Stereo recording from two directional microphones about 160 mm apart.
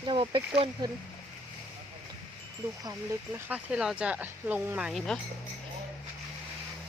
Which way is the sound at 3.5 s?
5° right (ahead or behind).